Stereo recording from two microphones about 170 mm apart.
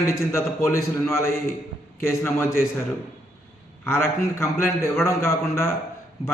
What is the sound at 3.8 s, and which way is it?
A man's voice, 15° left (ahead or behind).